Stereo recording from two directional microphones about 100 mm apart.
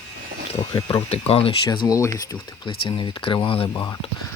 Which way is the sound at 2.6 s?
60° left (ahead or behind).